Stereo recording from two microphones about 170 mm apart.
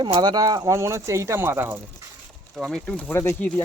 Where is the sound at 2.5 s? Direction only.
Centre (ahead or behind).